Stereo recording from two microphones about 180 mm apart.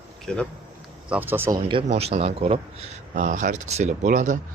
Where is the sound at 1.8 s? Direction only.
35° right (ahead or behind).